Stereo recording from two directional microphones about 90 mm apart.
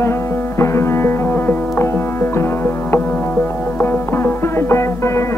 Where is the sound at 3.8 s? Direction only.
25° left (ahead or behind).